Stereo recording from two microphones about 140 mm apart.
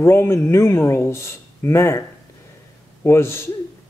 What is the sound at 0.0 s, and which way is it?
A man's voice, 20° left (ahead or behind).